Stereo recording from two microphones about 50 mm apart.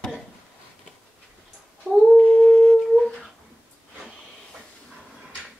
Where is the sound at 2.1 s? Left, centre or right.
Left.